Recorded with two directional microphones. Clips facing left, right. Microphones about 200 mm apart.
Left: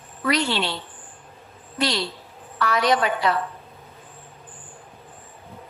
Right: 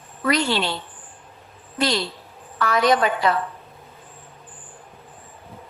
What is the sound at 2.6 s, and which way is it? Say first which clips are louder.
Speech: right 2 dB; 45° right (ahead or behind).